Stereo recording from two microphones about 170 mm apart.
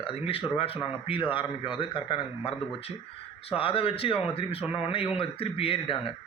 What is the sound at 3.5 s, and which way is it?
Speech, 35° left (ahead or behind).